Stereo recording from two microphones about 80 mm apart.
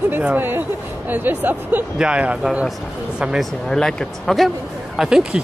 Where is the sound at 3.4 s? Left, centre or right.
Centre.